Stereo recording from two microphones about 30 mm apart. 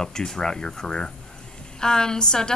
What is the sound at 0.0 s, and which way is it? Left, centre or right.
A woman's voice, centre.